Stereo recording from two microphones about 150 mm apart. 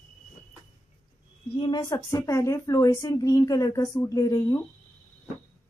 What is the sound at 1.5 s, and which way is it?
A woman's voice, 30° left (ahead or behind).